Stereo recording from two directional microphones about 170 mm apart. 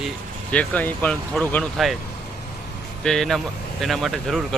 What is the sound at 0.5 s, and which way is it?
Speech, 10° left (ahead or behind).